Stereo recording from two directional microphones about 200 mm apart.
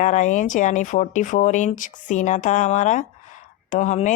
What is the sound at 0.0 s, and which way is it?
Speech, 40° left (ahead or behind).